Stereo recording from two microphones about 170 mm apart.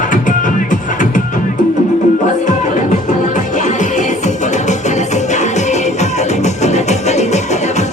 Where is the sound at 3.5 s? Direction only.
45° left (ahead or behind).